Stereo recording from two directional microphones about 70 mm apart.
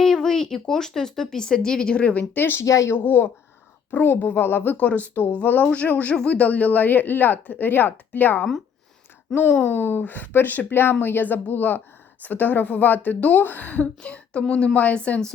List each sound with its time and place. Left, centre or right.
0.0 s a sound: centre
0.7 s speech: centre; by 2.6 s left
2.6 s speech: left
2.9 s speech: left